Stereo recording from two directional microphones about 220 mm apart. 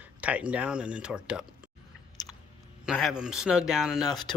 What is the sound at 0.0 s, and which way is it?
Speech, 5° right (ahead or behind).